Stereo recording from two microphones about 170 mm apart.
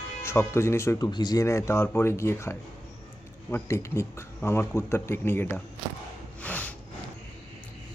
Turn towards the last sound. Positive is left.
turn(degrees=10)  # may be behind; listen again after turning